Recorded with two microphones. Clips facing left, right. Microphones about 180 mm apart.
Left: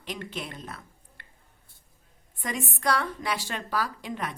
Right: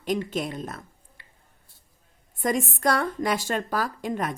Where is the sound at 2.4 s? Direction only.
45° right (ahead or behind).